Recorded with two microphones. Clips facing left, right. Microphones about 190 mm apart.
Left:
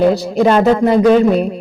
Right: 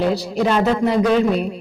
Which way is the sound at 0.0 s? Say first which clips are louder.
Left 7 dB; 50° left (ahead or behind).